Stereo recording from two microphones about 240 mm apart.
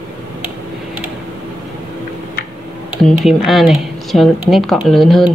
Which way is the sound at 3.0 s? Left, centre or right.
Centre.